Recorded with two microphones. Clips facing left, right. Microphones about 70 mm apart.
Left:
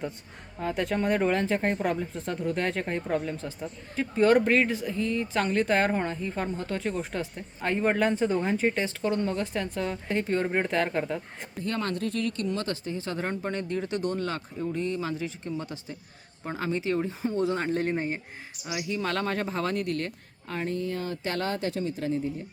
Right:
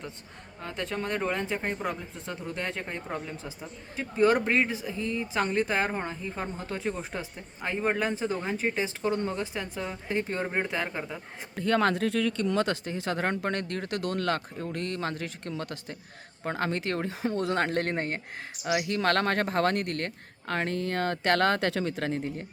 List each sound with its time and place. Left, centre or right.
0.6 s speech: centre
7.3 s speech: centre
8.8 s speech: centre
11.5 s speech: right
16.4 s speech: right
20.5 s speech: right